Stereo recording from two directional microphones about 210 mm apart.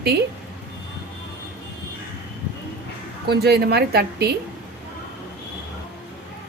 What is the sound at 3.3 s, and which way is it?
A woman's voice, 50° right (ahead or behind).